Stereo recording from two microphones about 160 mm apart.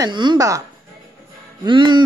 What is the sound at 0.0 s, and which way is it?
Speech, 30° right (ahead or behind).